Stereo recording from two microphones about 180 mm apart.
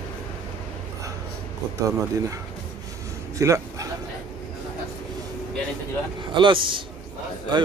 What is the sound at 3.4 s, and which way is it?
Speech, 15° right (ahead or behind).